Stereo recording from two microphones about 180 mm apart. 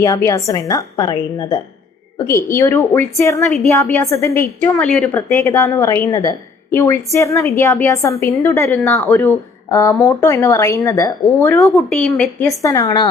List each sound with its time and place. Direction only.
0.0 s a woman's voice: 15° left (ahead or behind)
11.6 s a woman's voice: centre (ahead or behind)
12.5 s a woman's voice: 15° left (ahead or behind)